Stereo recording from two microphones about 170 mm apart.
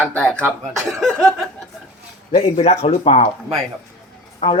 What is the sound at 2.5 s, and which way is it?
Speech, 35° left (ahead or behind).